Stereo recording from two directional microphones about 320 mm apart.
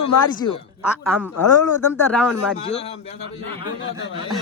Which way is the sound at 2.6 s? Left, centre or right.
Centre.